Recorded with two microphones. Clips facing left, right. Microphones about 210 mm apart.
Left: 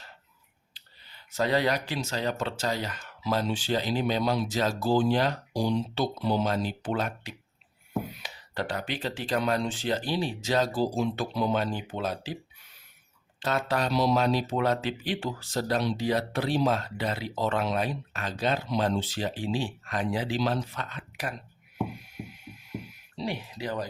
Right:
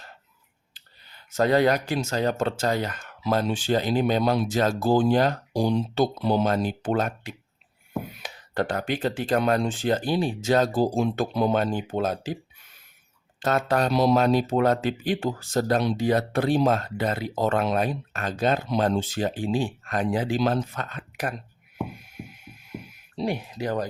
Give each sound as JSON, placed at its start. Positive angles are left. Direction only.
{"t": 0.7, "sound": "speech", "side_deg": -45}
{"t": 13.4, "sound": "speech", "side_deg": -50}
{"t": 23.1, "sound": "speech", "side_deg": -50}